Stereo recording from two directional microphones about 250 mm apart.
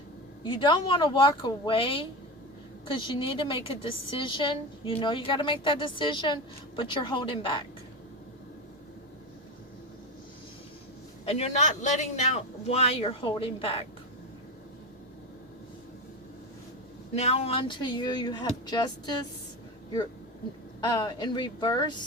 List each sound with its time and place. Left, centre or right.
0.4 s a woman's voice: centre
11.3 s a woman's voice: left
17.2 s speech: left
20.8 s speech: centre